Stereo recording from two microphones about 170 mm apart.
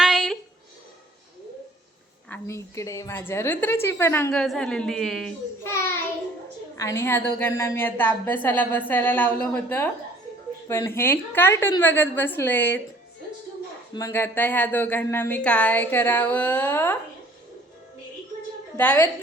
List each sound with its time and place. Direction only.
0.0 s a sound: centre (ahead or behind)
2.3 s a woman's voice: 15° left (ahead or behind); by 5.3 s centre (ahead or behind)
5.6 s child singing: 15° left (ahead or behind)
6.7 s a woman's voice: 15° left (ahead or behind)
13.9 s a woman's voice: 15° left (ahead or behind)
18.8 s a woman's voice: 10° left (ahead or behind)